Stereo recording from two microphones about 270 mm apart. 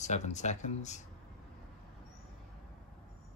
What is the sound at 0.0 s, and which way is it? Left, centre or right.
Speech, left.